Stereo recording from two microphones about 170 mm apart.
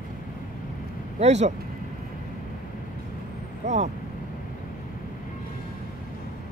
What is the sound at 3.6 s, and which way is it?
Speech, 45° right (ahead or behind).